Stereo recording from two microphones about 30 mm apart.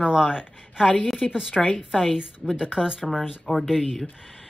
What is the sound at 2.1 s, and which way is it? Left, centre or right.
Speech, right.